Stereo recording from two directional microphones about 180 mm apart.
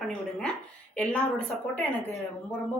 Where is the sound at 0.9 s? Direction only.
5° left (ahead or behind).